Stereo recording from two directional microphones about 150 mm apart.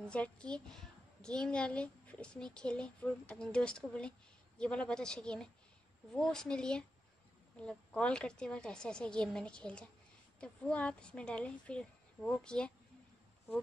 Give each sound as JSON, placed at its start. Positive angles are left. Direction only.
{"t": 0.1, "sound": "a child's voice", "side_deg": 5}